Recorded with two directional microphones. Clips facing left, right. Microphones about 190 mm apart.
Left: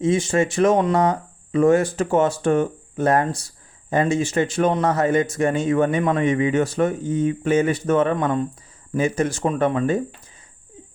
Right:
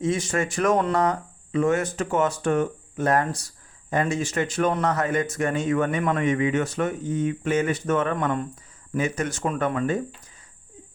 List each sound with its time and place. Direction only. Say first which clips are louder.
0.0 s speech: left 5 dB; 25° left (ahead or behind)
1.5 s speech: left 6 dB; 35° left (ahead or behind)